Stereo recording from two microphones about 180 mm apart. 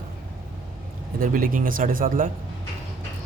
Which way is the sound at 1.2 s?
50° right (ahead or behind).